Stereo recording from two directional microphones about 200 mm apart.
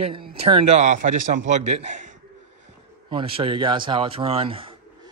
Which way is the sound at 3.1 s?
25° right (ahead or behind).